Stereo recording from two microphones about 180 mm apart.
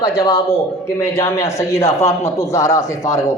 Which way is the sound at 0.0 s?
15° left (ahead or behind).